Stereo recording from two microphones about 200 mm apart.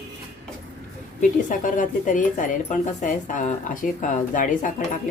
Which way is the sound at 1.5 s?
40° left (ahead or behind).